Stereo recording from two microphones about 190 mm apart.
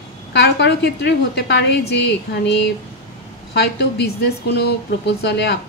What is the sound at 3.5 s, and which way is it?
Speech, 60° left (ahead or behind).